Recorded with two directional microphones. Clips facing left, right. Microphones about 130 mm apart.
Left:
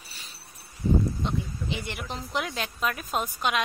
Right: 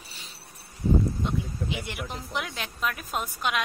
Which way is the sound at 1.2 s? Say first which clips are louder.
Right 1 dB; 5° right (ahead or behind).